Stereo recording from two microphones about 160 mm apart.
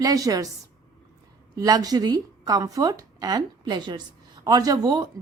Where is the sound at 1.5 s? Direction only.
25° right (ahead or behind).